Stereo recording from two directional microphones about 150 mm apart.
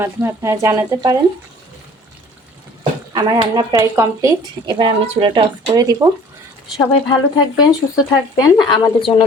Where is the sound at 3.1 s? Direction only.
25° right (ahead or behind).